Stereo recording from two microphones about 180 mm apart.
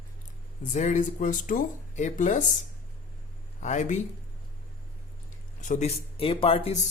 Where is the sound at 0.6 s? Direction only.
45° left (ahead or behind).